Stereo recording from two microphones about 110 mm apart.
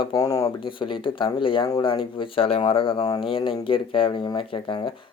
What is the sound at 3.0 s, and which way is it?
Speech, 35° left (ahead or behind).